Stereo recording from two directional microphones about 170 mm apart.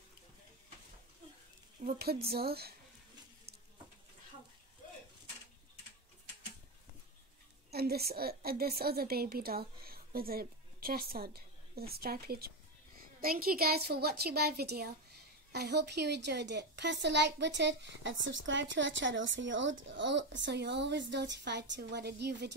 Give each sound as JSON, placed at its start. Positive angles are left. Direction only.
{"t": 1.9, "sound": "a woman's voice", "side_deg": -65}
{"t": 7.7, "sound": "a woman's voice", "side_deg": -65}